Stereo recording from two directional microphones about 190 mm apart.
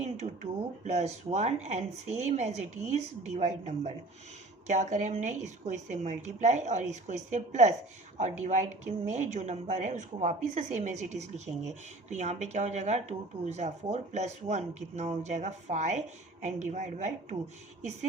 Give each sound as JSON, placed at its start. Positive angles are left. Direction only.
{"t": 0.9, "sound": "a woman's voice", "side_deg": -35}